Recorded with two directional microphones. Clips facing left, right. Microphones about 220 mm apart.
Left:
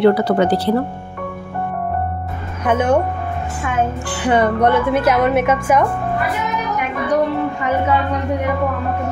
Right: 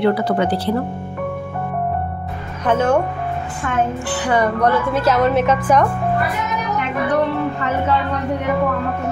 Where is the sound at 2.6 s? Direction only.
15° left (ahead or behind).